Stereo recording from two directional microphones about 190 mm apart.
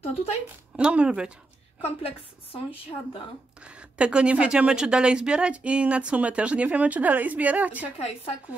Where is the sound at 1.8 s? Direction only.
30° left (ahead or behind).